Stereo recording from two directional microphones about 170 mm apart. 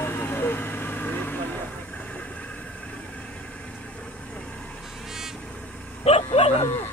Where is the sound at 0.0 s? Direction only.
10° left (ahead or behind).